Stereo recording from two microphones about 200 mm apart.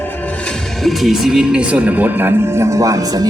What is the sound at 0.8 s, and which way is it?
Speech, centre (ahead or behind).